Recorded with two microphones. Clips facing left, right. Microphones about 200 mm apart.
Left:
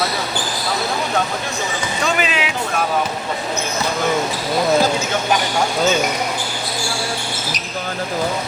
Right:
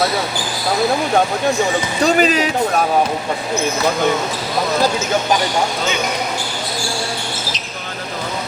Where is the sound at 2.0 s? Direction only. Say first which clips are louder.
Right 7 dB; 40° right (ahead or behind).